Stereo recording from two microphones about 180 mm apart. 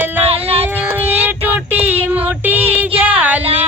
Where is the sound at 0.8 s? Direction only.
10° right (ahead or behind).